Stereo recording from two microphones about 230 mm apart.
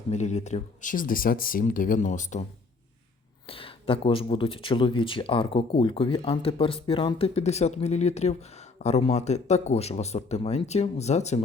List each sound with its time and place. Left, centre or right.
0.1 s speech: left
3.4 s speech: left